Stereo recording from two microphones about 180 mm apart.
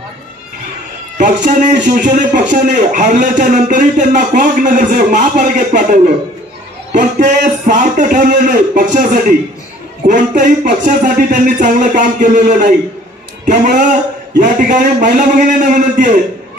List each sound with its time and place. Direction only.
1.1 s a man's voice: 45° right (ahead or behind)